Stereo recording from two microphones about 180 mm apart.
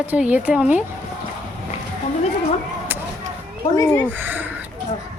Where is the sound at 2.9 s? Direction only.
10° right (ahead or behind).